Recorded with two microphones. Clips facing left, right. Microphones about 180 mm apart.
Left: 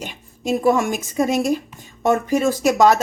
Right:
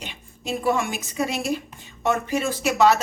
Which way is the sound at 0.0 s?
45° left (ahead or behind).